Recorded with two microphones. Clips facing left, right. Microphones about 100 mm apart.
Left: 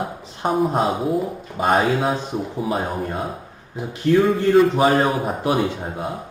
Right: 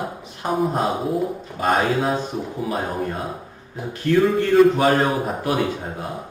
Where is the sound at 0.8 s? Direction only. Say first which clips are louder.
Left 2 dB; centre (ahead or behind).